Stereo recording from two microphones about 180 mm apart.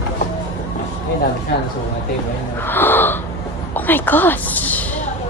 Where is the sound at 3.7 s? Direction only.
10° left (ahead or behind).